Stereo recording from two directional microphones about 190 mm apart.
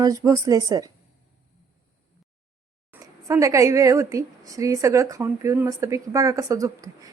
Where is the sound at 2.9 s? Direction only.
15° right (ahead or behind).